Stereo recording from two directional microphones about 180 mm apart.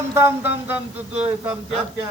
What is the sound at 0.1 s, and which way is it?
Music, 10° right (ahead or behind).